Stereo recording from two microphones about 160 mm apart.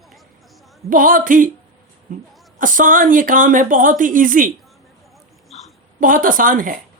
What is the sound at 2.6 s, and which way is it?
Speech, 55° right (ahead or behind).